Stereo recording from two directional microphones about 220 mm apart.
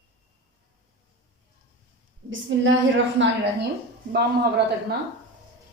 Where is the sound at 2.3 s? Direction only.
60° right (ahead or behind).